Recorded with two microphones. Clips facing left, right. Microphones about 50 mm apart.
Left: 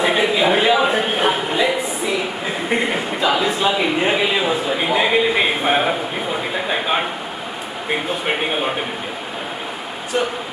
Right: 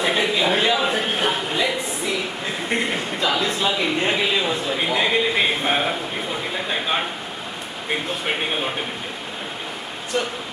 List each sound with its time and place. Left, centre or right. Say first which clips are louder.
0.0 s a sound: left 4 dB; centre
7.9 s speech: left 3 dB; centre
10.1 s speech: left 4 dB; left